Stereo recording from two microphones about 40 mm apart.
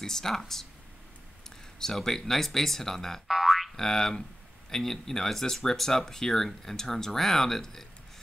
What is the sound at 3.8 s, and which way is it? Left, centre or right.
Speech, centre.